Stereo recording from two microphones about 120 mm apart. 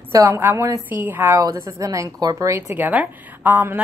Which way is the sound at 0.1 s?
25° right (ahead or behind).